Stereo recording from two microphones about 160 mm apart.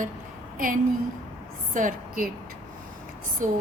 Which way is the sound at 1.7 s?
55° right (ahead or behind).